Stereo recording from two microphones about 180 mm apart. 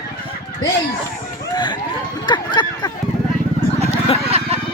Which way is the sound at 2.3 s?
25° left (ahead or behind).